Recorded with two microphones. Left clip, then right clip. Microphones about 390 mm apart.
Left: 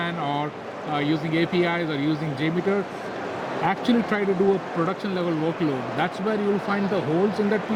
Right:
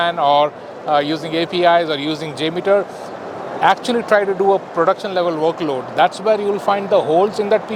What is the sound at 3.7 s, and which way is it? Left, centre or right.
Speech, right.